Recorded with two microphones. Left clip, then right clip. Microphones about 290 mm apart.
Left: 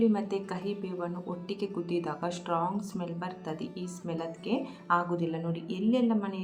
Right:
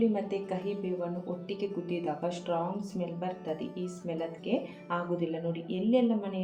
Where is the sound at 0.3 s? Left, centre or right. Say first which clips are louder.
Even; left.